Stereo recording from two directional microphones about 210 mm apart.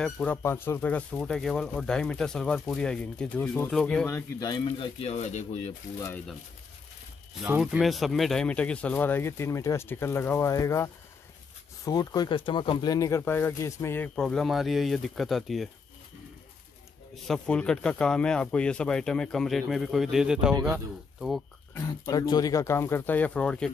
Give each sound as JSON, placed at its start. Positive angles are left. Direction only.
{"t": 0.0, "sound": "speech", "side_deg": 5}
{"t": 4.4, "sound": "speech", "side_deg": 20}
{"t": 5.9, "sound": "speech", "side_deg": 10}
{"t": 7.6, "sound": "speech", "side_deg": 0}
{"t": 17.1, "sound": "speech", "side_deg": 5}
{"t": 21.7, "sound": "speech", "side_deg": 15}